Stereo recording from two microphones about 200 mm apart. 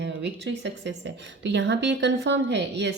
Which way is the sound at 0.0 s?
60° right (ahead or behind).